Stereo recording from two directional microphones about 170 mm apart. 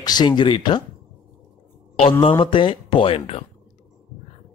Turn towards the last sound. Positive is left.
turn(degrees=35)  # may be behind; listen again after turning